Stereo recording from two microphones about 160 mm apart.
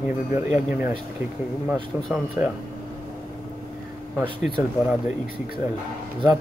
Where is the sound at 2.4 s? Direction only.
15° right (ahead or behind).